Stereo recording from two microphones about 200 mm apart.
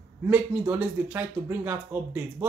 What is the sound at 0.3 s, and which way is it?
Speech, 5° right (ahead or behind).